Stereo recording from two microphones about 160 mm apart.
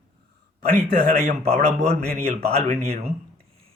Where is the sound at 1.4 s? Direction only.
40° right (ahead or behind).